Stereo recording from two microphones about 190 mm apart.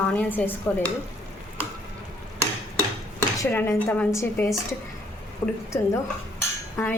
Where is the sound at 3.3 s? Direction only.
10° left (ahead or behind).